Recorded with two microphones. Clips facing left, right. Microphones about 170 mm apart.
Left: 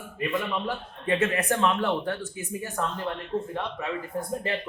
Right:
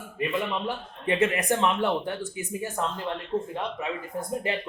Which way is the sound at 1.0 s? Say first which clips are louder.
Right 1 dB; 15° right (ahead or behind).